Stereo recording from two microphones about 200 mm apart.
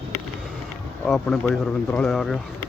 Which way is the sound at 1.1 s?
Centre (ahead or behind).